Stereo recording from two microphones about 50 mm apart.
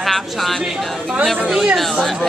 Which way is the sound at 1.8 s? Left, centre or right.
Centre.